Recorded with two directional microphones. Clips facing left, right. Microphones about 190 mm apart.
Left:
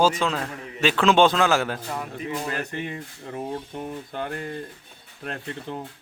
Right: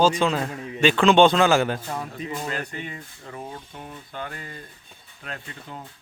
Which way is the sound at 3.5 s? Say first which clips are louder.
Left 7 dB; 45° left (ahead or behind).